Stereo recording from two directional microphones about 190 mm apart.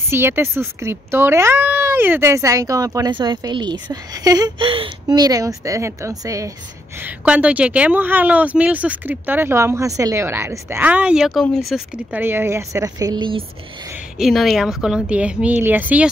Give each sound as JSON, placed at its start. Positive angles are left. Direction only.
{"t": 0.1, "sound": "speech", "side_deg": -10}
{"t": 12.2, "sound": "speech", "side_deg": -10}
{"t": 14.1, "sound": "a woman's voice", "side_deg": 0}